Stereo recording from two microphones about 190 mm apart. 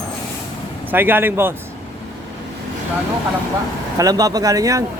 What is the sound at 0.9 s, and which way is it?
Speech, 10° right (ahead or behind).